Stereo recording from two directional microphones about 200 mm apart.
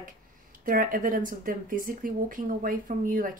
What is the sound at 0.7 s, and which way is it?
Speech, 45° right (ahead or behind).